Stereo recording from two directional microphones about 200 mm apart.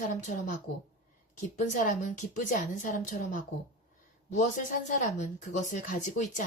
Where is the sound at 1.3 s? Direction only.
40° left (ahead or behind).